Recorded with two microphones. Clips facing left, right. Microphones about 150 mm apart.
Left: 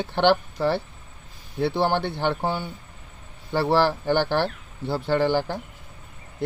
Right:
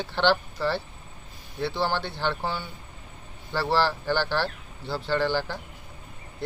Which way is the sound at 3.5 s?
20° left (ahead or behind).